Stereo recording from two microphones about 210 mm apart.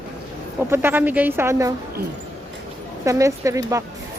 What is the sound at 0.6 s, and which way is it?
Speech, 10° right (ahead or behind).